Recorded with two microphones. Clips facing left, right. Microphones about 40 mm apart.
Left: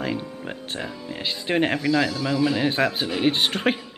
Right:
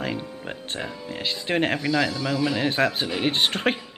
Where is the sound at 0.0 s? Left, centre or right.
Centre.